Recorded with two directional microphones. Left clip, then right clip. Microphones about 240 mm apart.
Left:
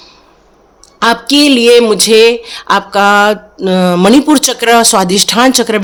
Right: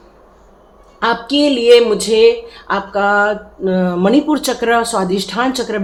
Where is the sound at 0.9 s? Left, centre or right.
Left.